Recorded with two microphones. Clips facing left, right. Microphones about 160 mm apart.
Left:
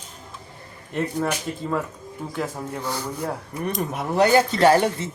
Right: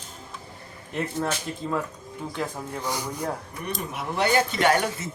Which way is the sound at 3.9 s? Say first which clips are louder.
Left 5 dB; 35° left (ahead or behind).